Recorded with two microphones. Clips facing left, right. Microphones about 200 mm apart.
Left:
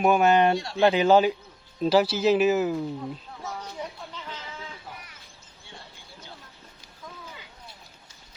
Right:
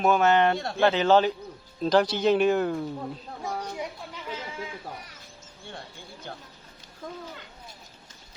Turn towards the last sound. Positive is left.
turn(degrees=-55)  # may be behind; listen again after turning